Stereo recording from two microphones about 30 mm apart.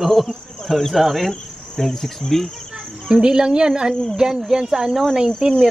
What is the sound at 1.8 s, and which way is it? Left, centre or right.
Cricket, centre.